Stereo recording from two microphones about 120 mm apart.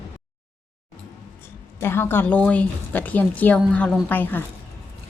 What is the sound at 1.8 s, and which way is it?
A woman's voice, 20° left (ahead or behind).